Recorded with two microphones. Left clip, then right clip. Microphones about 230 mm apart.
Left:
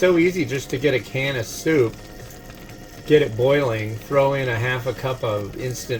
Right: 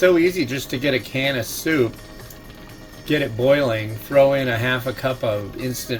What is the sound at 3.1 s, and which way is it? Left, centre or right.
Speech, right.